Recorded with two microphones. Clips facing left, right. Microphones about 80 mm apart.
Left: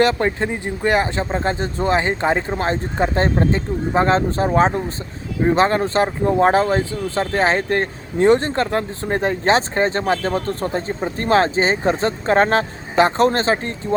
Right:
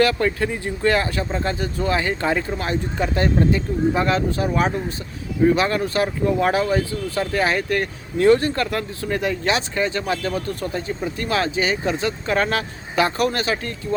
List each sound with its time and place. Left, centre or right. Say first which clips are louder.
0.0 s speech: left 2 dB; left